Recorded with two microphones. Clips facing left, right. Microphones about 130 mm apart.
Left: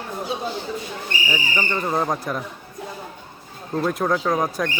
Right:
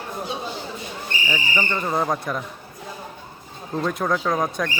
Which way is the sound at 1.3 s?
10° left (ahead or behind).